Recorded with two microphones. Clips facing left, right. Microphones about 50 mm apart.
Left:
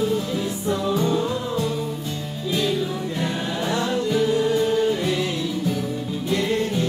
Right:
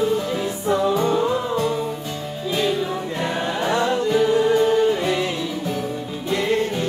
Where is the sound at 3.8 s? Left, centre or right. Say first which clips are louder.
Right 2 dB; centre.